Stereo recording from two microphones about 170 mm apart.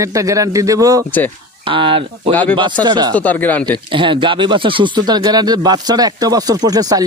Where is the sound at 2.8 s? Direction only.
25° right (ahead or behind).